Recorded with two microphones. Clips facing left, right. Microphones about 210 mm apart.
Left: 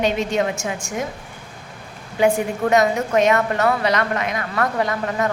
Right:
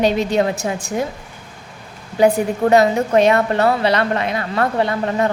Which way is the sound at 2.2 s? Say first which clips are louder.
Right 3 dB; 35° right (ahead or behind).